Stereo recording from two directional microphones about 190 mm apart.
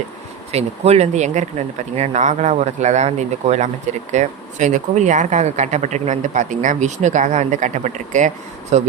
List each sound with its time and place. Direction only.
0.5 s speech: 35° right (ahead or behind)